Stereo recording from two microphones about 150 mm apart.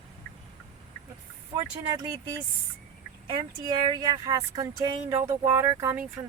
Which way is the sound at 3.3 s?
30° right (ahead or behind).